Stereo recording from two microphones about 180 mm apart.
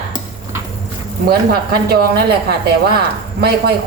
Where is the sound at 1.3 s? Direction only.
60° right (ahead or behind).